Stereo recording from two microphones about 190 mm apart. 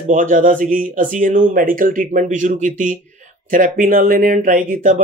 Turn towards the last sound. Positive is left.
turn(degrees=-45)  # may be behind; listen again after turning